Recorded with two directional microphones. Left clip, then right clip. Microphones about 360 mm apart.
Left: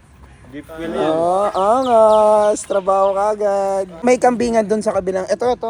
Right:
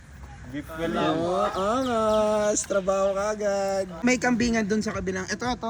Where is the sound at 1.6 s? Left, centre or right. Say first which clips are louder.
Left 12 dB; left.